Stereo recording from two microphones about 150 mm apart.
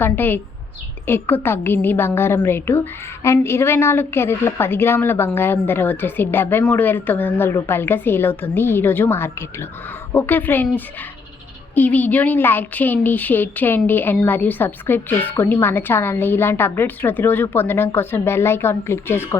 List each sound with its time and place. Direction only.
0.0 s a woman's voice: 15° left (ahead or behind)